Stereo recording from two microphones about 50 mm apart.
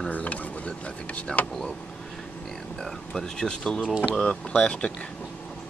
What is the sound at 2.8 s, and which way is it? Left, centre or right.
Speech, centre.